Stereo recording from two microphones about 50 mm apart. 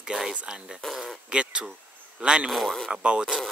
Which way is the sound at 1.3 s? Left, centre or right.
Right.